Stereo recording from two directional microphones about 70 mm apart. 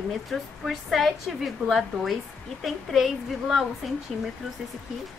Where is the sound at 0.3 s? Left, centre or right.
Centre.